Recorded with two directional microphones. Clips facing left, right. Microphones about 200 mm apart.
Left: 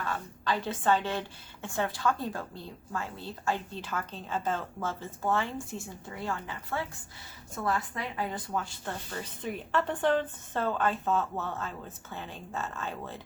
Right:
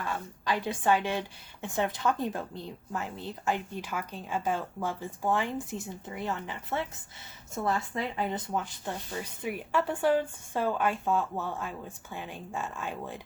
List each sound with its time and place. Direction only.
0.0 s speech: 15° right (ahead or behind)